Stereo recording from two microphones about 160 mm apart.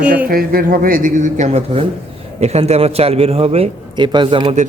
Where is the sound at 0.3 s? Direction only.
65° right (ahead or behind); by 4.5 s 30° right (ahead or behind).